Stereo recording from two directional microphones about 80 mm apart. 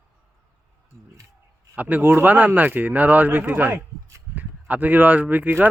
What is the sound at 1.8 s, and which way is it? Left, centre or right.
Speech, right.